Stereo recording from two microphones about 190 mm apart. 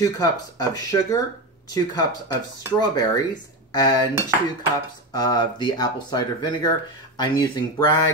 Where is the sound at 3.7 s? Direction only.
20° left (ahead or behind).